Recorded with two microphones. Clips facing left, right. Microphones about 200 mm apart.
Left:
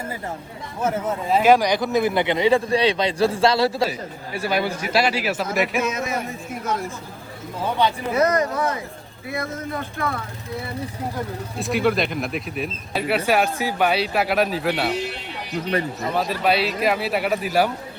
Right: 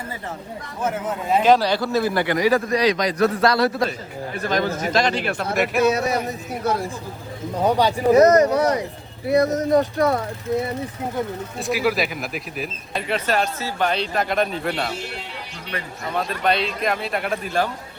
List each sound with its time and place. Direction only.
1.4 s speech: 10° left (ahead or behind); by 3.8 s 25° left (ahead or behind)
4.4 s a man's voice: 10° left (ahead or behind)
5.8 s speech: 35° right (ahead or behind)
11.5 s speech: centre (ahead or behind)
16.1 s speech: 5° left (ahead or behind)